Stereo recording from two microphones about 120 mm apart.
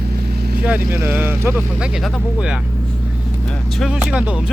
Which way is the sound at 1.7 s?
5° right (ahead or behind).